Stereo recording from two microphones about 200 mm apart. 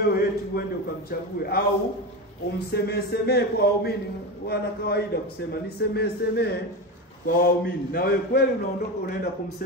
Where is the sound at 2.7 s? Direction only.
55° left (ahead or behind).